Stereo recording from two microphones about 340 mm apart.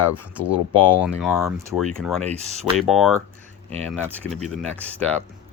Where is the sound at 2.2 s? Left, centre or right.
Centre.